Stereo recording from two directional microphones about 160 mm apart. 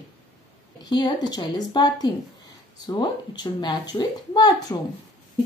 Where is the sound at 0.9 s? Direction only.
25° left (ahead or behind).